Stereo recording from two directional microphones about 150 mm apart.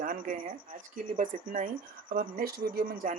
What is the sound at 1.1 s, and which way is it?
Speech, 60° right (ahead or behind).